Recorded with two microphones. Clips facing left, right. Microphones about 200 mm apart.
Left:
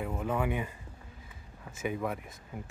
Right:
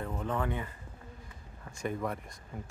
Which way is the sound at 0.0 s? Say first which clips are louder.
Left 2 dB; 10° left (ahead or behind).